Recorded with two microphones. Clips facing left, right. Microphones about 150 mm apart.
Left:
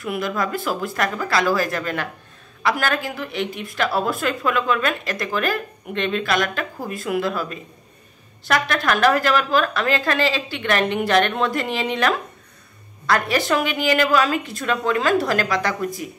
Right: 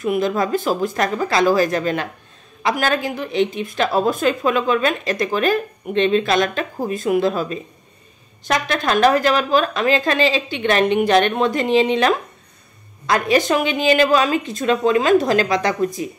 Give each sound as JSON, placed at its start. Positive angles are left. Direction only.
{"t": 0.0, "sound": "a woman's voice", "side_deg": -25}